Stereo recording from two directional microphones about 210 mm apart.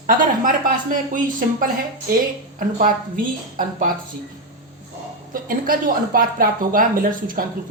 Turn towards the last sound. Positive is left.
turn(degrees=-40)  # may be behind; listen again after turning